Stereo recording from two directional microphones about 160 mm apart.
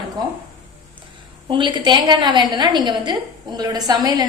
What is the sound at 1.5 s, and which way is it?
A woman's voice, 30° right (ahead or behind).